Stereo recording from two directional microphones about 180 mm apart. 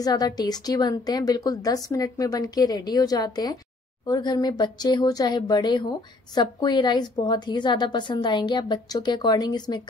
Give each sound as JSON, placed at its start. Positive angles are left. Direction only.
{"t": 0.0, "sound": "speech", "side_deg": 20}